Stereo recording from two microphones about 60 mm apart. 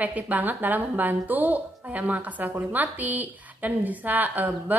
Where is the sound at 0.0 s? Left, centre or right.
Right.